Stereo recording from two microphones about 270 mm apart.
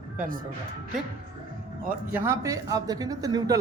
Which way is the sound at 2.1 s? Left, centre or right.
Centre.